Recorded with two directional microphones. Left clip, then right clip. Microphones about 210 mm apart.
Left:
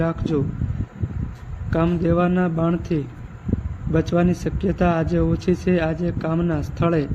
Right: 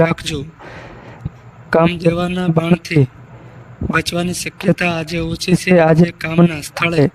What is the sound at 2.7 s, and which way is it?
Speech, 50° right (ahead or behind).